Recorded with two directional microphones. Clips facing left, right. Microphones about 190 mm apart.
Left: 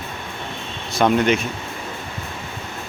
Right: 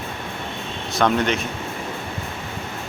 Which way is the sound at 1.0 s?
10° left (ahead or behind).